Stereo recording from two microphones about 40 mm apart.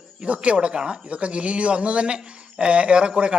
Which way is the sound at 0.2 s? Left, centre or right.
Right.